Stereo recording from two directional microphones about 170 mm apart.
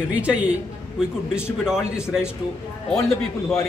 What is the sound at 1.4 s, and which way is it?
Speech, 5° right (ahead or behind).